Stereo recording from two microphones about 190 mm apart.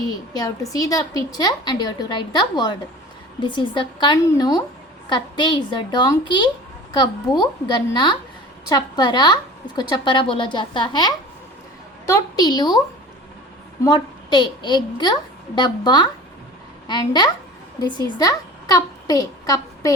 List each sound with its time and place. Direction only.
0.7 s a woman's voice: 20° left (ahead or behind)
13.8 s a woman's voice: 20° left (ahead or behind)